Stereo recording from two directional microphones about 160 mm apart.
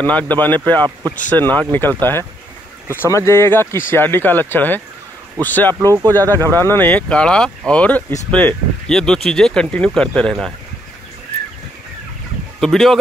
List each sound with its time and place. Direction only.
0.0 s speech: 10° left (ahead or behind)
5.8 s speech: 20° right (ahead or behind)
6.3 s speech: 15° left (ahead or behind)
12.5 s speech: centre (ahead or behind)